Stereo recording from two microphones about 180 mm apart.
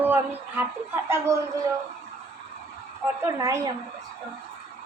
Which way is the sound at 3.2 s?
15° right (ahead or behind).